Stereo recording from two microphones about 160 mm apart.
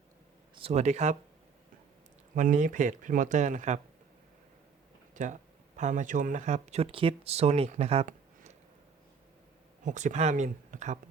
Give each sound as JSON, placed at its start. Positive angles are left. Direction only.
{"t": 0.5, "sound": "speech", "side_deg": -40}
{"t": 2.3, "sound": "speech", "side_deg": -55}
{"t": 5.1, "sound": "speech", "side_deg": -50}
{"t": 9.8, "sound": "speech", "side_deg": -50}